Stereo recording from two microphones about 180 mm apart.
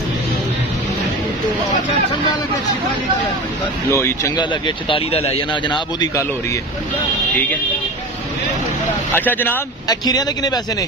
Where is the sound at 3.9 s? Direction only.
15° left (ahead or behind).